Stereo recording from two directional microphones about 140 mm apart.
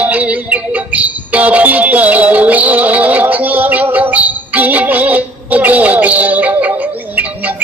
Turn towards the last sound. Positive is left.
turn(degrees=-10)  # may be behind; listen again after turning